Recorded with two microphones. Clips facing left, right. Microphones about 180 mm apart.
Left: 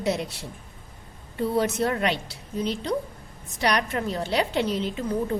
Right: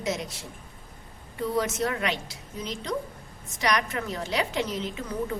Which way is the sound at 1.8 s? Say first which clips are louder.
Left 3 dB; 35° left (ahead or behind).